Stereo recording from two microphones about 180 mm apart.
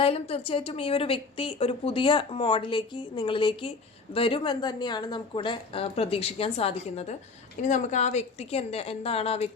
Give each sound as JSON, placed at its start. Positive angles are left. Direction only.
{"t": 0.0, "sound": "a woman's voice", "side_deg": 30}